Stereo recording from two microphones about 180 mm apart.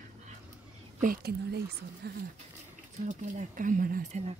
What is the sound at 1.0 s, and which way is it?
Speech, 55° right (ahead or behind).